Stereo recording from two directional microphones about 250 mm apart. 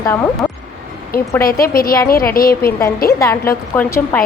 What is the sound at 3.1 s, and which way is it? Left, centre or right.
A woman's voice, centre.